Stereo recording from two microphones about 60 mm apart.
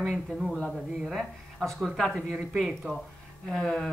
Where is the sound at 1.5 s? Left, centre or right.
Centre.